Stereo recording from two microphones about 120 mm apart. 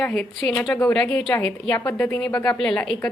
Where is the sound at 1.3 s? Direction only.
20° left (ahead or behind).